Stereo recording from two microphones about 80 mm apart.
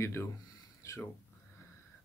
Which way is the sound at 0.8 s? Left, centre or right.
Left.